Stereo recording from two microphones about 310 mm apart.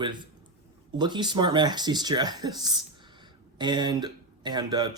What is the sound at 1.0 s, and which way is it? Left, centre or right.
Speech, centre.